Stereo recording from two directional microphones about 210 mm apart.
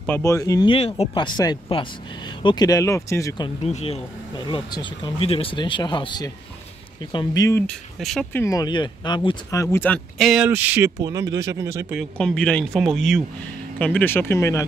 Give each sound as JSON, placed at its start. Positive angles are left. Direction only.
{"t": 0.0, "sound": "speech", "side_deg": 10}
{"t": 7.6, "sound": "speech", "side_deg": 0}
{"t": 11.9, "sound": "speech", "side_deg": 0}